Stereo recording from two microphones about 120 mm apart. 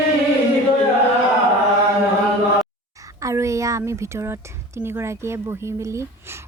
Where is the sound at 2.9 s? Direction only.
25° right (ahead or behind).